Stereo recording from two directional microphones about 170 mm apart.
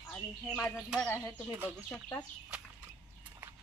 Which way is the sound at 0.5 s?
Centre (ahead or behind).